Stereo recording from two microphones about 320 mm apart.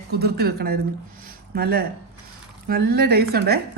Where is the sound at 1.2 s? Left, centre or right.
Right.